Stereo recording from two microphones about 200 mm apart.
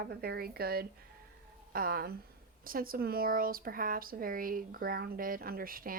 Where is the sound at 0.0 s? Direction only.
50° right (ahead or behind).